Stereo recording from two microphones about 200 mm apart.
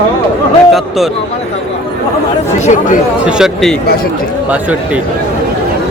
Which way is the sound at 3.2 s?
5° right (ahead or behind).